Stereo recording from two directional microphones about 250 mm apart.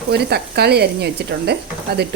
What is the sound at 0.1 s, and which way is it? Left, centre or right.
Speech, right.